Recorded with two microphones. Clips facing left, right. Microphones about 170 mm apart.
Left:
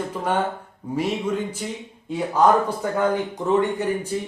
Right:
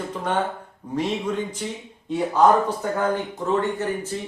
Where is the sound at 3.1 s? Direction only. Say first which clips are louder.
Left 2 dB; 15° left (ahead or behind).